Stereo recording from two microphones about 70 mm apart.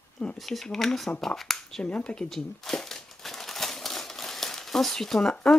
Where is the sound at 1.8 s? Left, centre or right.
Centre.